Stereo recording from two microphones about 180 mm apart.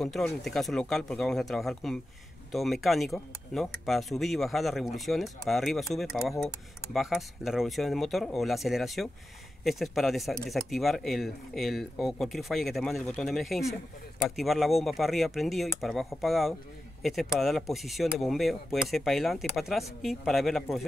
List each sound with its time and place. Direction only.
0.0 s speech: centre (ahead or behind)